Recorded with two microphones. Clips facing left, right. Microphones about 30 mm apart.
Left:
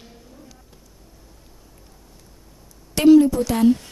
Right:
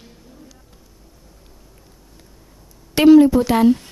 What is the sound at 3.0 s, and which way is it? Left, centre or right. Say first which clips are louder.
Speech: right 3 dB; right.